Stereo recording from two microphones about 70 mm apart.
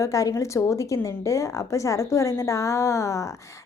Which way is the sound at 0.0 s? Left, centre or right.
Left.